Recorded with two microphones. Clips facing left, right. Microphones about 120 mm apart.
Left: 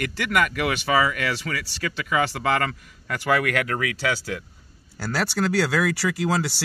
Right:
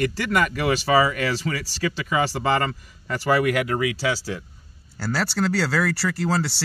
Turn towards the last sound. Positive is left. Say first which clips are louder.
# even
turn(degrees=0)  # may be behind; listen again after turning